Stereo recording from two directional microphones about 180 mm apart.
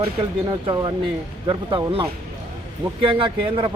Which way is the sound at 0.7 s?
25° right (ahead or behind).